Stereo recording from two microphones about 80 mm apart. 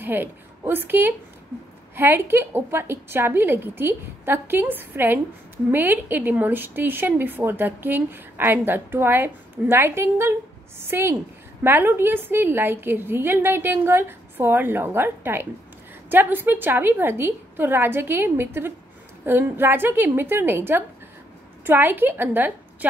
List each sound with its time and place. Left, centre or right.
0.0 s a woman's voice: right